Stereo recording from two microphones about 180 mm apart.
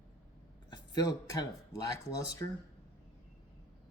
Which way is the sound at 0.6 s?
25° left (ahead or behind).